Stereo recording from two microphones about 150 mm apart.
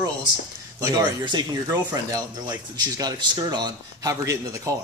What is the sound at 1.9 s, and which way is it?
Speech, 25° right (ahead or behind).